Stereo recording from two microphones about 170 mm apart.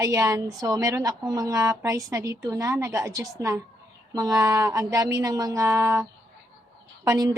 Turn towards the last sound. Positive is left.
turn(degrees=-20)  # may be behind; listen again after turning